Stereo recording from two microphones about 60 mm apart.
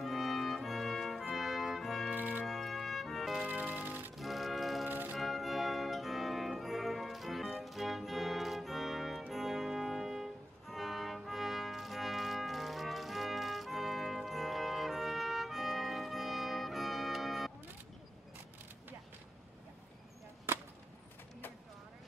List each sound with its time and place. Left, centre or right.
0.0 s brass instrument: centre
2.1 s music: right
2.4 s music: centre
3.4 s music: right
4.2 s music: centre
4.8 s music: right
5.1 s music: centre